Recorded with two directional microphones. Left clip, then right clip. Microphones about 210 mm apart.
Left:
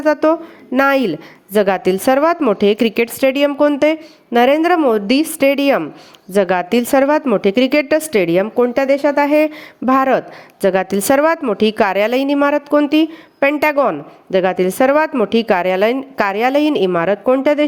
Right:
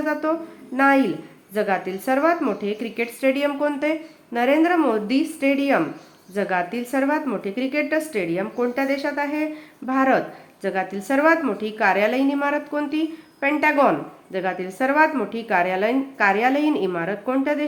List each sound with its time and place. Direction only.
0.0 s a woman's voice: 45° left (ahead or behind)